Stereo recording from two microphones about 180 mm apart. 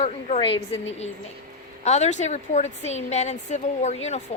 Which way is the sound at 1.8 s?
40° left (ahead or behind).